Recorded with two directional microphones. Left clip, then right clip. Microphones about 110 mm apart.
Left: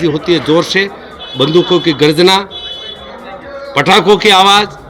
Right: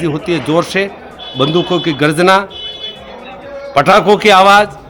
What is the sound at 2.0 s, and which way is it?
Speech, 30° right (ahead or behind).